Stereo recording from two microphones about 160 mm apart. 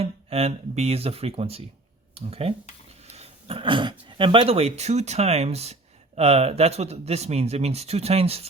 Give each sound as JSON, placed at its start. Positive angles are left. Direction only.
{"t": 0.0, "sound": "a man's voice", "side_deg": -40}
{"t": 3.1, "sound": "a sound", "side_deg": -40}
{"t": 4.0, "sound": "a man's voice", "side_deg": -30}